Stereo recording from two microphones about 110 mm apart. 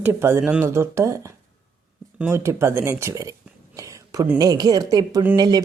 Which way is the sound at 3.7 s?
30° right (ahead or behind).